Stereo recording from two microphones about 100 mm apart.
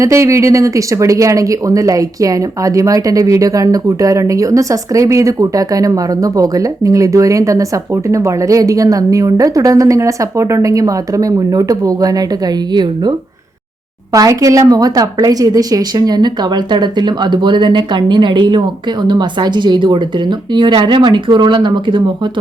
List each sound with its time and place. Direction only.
0.0 s a woman's voice: 30° right (ahead or behind); by 13.1 s 45° right (ahead or behind)
14.1 s a woman's voice: 35° right (ahead or behind); by 22.1 s 55° right (ahead or behind)